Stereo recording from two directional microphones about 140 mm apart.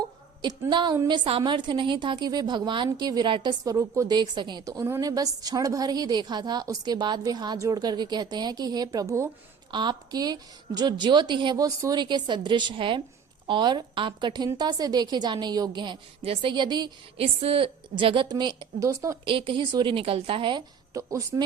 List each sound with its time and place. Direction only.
0.7 s a woman's voice: 35° right (ahead or behind)
17.2 s a woman's voice: 45° right (ahead or behind)
18.9 s a woman's voice: 20° right (ahead or behind)
19.2 s a woman's voice: 40° right (ahead or behind); by 21.4 s 25° right (ahead or behind)